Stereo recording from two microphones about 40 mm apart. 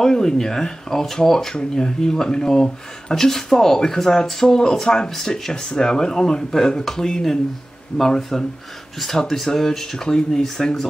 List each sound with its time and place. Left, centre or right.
0.0 s speech: centre